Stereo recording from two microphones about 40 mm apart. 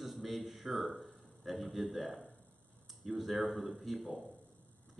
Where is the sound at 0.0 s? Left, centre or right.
Centre.